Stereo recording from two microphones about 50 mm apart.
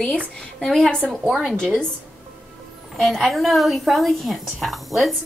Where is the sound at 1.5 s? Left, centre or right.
Centre.